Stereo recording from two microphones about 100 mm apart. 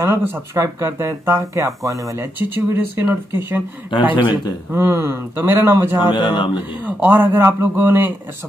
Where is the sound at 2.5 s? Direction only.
20° right (ahead or behind).